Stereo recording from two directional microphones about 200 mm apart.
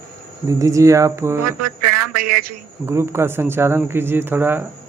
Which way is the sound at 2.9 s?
15° right (ahead or behind).